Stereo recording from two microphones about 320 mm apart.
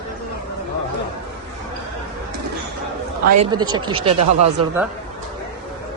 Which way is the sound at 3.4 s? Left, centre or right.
Centre.